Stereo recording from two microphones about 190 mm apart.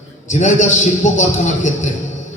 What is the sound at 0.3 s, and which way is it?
A man's voice, 40° left (ahead or behind).